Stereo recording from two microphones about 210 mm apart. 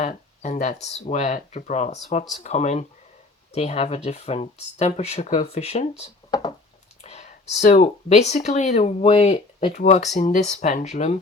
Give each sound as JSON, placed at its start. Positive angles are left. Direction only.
{"t": 0.0, "sound": "speech", "side_deg": 35}